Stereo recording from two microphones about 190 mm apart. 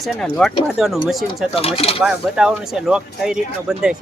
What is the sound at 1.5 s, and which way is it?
Speech, 30° left (ahead or behind).